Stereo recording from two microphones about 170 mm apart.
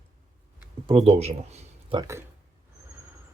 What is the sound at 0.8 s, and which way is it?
Speech, 35° right (ahead or behind).